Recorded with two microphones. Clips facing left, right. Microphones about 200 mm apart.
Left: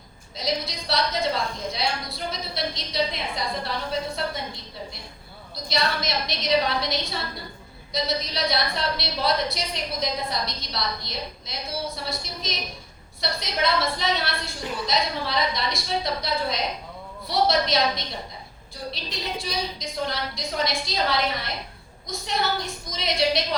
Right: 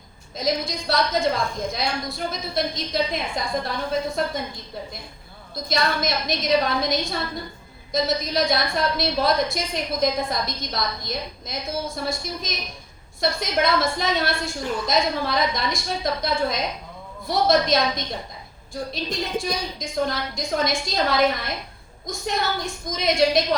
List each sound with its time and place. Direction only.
0.3 s a woman's voice: 50° right (ahead or behind)
5.6 s a woman's voice: 50° right (ahead or behind)